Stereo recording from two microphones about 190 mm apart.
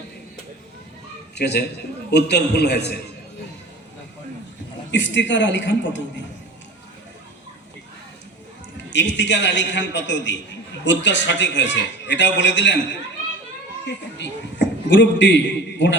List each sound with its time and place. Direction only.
1.4 s a man's voice: 60° left (ahead or behind)
4.9 s a man's voice: 70° left (ahead or behind)
8.9 s a man's voice: 70° left (ahead or behind)